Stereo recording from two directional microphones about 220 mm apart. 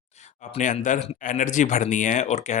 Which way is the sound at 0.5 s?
35° left (ahead or behind).